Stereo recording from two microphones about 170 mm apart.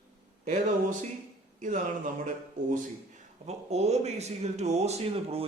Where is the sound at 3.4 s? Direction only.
40° right (ahead or behind).